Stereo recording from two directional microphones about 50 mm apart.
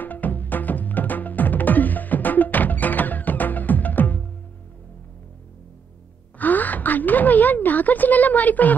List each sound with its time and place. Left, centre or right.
0.0 s music: left
6.3 s gasp: left